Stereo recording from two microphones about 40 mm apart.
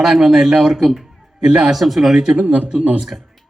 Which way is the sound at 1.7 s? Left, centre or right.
Centre.